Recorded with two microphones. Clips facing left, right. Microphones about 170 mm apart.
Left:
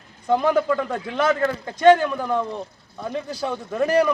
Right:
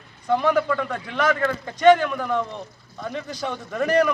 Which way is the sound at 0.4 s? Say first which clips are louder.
Left 1 dB; 15° left (ahead or behind).